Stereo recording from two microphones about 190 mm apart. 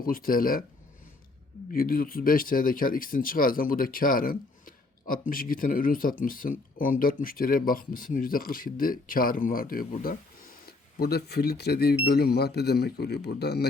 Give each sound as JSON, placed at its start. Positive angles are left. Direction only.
{"t": 0.0, "sound": "speech", "side_deg": 50}
{"t": 1.7, "sound": "speech", "side_deg": 50}